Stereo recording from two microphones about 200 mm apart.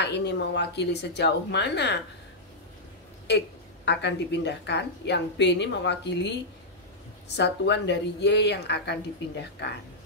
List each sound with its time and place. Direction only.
0.0 s a woman's voice: 60° left (ahead or behind)
3.3 s a woman's voice: 60° left (ahead or behind)